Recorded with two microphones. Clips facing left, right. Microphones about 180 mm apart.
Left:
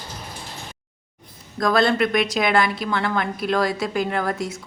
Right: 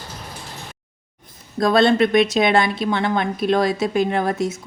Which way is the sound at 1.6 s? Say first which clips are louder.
Right 4 dB; 25° right (ahead or behind).